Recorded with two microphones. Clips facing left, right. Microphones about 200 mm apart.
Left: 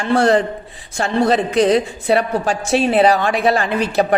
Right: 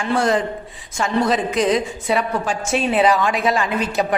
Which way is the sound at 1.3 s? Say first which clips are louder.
Left 4 dB; 35° left (ahead or behind).